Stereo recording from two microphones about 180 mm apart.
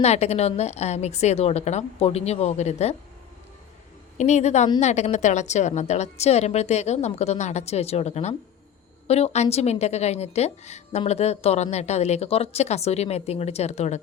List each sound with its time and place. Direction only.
0.0 s a woman's voice: 35° left (ahead or behind)
4.2 s a woman's voice: 40° left (ahead or behind)